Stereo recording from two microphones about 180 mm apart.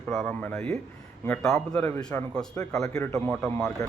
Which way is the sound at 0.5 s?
15° left (ahead or behind).